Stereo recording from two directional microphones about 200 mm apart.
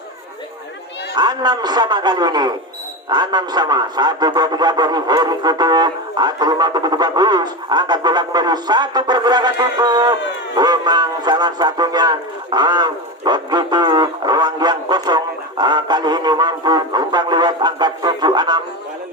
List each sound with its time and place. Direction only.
1.1 s speech: 20° right (ahead or behind)